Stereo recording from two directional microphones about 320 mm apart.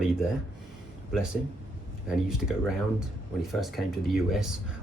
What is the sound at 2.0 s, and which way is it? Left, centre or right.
Speech, centre.